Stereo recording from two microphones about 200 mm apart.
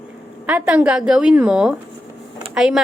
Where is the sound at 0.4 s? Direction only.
5° right (ahead or behind).